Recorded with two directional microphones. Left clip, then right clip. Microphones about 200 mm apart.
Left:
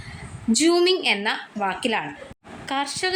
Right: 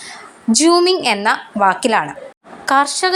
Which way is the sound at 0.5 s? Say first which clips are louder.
Right 6 dB; 10° right (ahead or behind).